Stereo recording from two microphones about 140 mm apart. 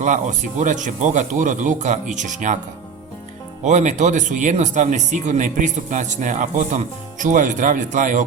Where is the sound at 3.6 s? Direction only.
60° right (ahead or behind).